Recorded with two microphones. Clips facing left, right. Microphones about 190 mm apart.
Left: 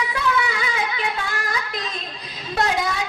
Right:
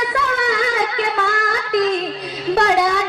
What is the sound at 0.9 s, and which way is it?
Singing, 70° right (ahead or behind).